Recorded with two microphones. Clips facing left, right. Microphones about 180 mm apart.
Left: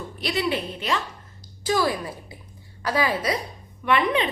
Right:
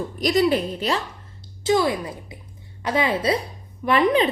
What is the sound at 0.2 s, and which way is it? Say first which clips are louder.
Speech: right 6 dB; 40° right (ahead or behind).